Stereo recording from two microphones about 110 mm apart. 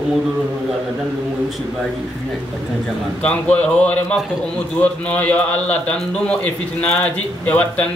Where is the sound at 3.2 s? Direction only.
10° left (ahead or behind).